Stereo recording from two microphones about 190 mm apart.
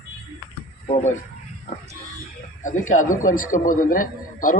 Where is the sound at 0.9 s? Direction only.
35° left (ahead or behind).